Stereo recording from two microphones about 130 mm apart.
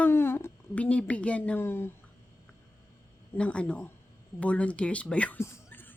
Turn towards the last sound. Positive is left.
turn(degrees=15)  # may be behind; listen again after turning